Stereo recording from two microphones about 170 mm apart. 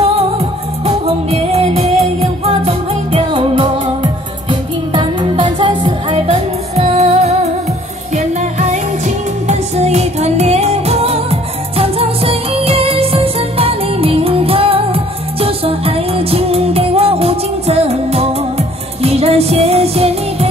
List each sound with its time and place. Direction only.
0.8 s music: 35° right (ahead or behind)
8.4 s music: 45° right (ahead or behind)